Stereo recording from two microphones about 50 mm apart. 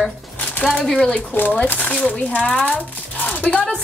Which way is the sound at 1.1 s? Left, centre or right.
Left.